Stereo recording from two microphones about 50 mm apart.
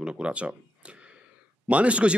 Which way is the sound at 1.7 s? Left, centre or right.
Right.